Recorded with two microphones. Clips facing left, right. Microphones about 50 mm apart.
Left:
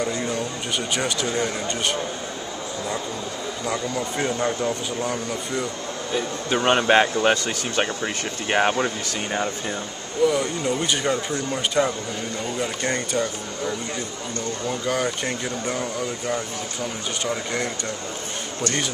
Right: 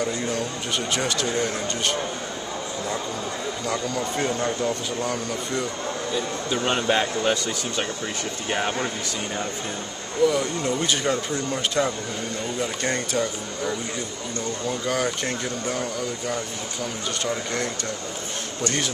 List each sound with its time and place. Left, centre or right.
0.9 s speech: centre
3.6 s speech: centre
6.1 s a man's voice: left
10.2 s speech: centre
14.7 s speech: centre